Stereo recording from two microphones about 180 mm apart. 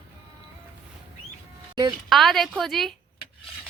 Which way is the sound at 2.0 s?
Centre (ahead or behind).